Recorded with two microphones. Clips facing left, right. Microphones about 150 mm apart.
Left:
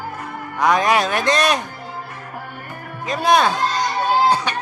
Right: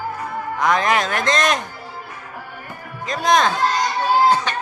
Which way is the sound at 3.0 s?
10° left (ahead or behind).